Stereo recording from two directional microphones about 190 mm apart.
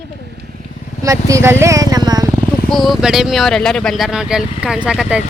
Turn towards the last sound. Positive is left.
turn(degrees=-5)  # may be behind; listen again after turning